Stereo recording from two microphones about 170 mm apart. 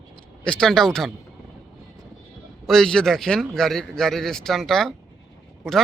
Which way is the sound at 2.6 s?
Centre (ahead or behind).